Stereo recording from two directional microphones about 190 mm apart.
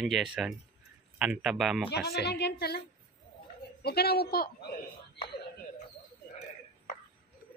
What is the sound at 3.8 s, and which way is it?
Speech, 55° left (ahead or behind).